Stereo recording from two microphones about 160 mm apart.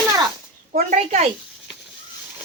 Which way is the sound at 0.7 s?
55° right (ahead or behind).